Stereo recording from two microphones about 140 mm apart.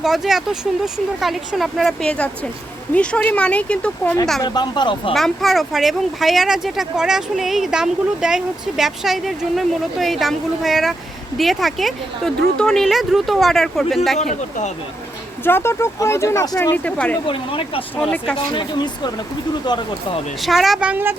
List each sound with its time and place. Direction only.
0.0 s speech: 5° right (ahead or behind)
4.4 s speech: 30° left (ahead or behind)
5.1 s speech: centre (ahead or behind)
14.2 s speech: 60° left (ahead or behind)
15.4 s speech: 15° left (ahead or behind)
17.2 s speech: 40° left (ahead or behind)
18.0 s speech: 5° left (ahead or behind)
18.3 s speech: 35° left (ahead or behind)
20.4 s speech: centre (ahead or behind)